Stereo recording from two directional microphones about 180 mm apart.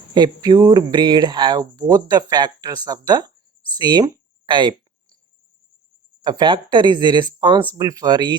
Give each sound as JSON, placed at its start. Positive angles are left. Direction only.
{"t": 0.1, "sound": "speech", "side_deg": -25}
{"t": 6.2, "sound": "speech", "side_deg": -25}